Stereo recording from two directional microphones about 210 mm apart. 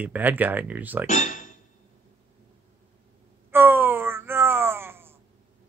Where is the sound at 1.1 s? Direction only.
35° left (ahead or behind).